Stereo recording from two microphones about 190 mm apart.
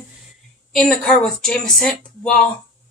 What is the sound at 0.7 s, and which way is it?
Speech, 5° left (ahead or behind).